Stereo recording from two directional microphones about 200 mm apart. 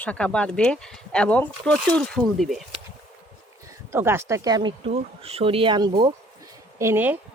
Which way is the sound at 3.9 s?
10° right (ahead or behind).